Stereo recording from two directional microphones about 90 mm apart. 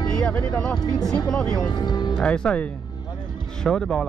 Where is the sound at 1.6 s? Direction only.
50° left (ahead or behind).